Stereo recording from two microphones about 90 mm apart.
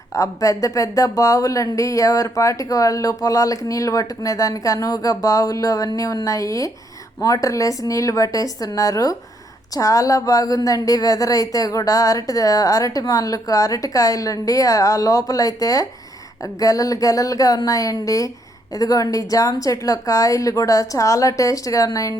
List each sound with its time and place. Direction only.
0.1 s a woman's voice: 35° left (ahead or behind)